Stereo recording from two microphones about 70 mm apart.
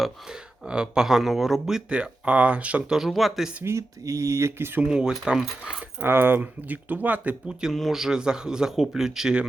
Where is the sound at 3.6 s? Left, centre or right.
Right.